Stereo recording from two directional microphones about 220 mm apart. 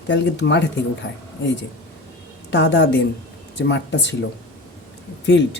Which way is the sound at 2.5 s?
55° left (ahead or behind).